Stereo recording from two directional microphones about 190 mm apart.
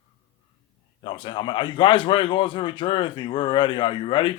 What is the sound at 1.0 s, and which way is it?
A man's voice, 25° left (ahead or behind).